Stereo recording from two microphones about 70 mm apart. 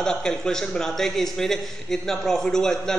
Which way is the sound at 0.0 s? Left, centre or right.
Centre.